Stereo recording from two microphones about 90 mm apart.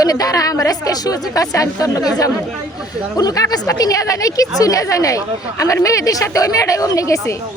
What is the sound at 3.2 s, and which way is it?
Speech, 45° left (ahead or behind).